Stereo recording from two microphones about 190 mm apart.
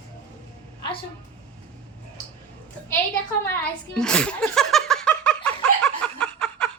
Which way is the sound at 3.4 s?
5° left (ahead or behind).